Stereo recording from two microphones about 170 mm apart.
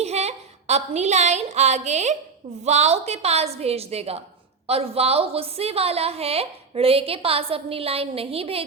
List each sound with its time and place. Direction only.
0.0 s a woman's voice: 40° right (ahead or behind)